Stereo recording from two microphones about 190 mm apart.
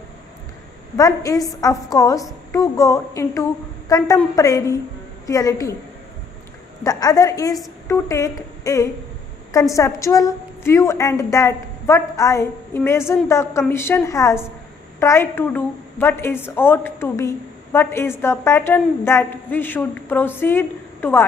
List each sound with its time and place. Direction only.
0.9 s a woman's voice: 20° left (ahead or behind)
6.8 s a woman's voice: 20° left (ahead or behind)